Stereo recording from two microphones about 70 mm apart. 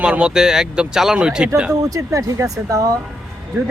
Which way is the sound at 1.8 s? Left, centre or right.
Right.